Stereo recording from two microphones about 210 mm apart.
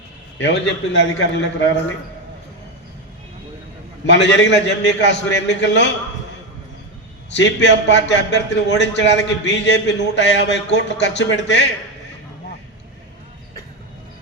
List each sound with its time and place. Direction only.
0.3 s a man's voice: 55° left (ahead or behind)
4.0 s a man's voice: 55° left (ahead or behind)
7.3 s a man's voice: 55° left (ahead or behind)